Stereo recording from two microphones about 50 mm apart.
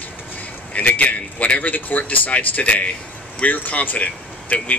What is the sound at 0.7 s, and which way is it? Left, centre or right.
A man's voice, left.